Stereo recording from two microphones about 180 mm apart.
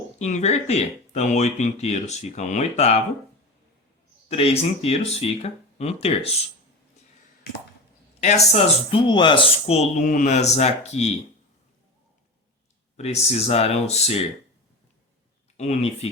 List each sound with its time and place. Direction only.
0.2 s speech: 40° left (ahead or behind)
4.3 s speech: 35° left (ahead or behind)
8.2 s speech: 35° left (ahead or behind)
13.0 s speech: 35° left (ahead or behind)
15.5 s speech: 40° left (ahead or behind)